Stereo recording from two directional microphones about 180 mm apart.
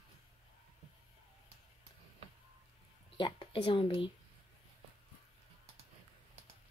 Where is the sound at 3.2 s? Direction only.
25° left (ahead or behind).